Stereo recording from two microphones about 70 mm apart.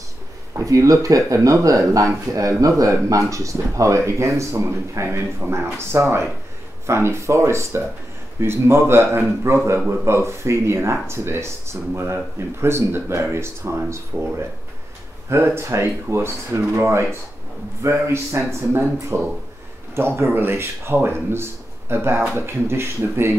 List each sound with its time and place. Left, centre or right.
0.6 s speech: right
15.2 s speech: right